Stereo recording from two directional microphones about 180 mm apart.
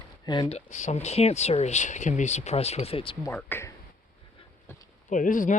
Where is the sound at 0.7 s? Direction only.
40° left (ahead or behind).